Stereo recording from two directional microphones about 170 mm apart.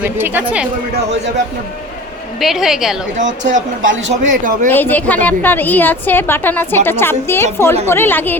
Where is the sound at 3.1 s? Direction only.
45° right (ahead or behind).